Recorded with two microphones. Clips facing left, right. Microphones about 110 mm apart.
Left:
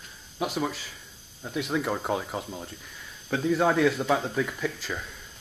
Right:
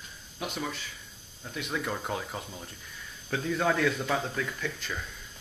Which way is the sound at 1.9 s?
10° left (ahead or behind).